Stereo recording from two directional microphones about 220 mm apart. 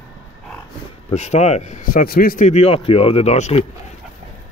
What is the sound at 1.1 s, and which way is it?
Speech, 30° left (ahead or behind).